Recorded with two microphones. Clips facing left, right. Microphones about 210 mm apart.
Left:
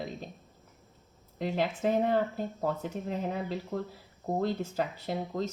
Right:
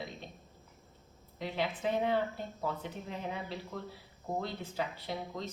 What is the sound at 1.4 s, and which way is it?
Speech, 45° left (ahead or behind).